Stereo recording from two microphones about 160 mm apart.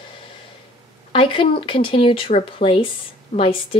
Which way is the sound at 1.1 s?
35° left (ahead or behind).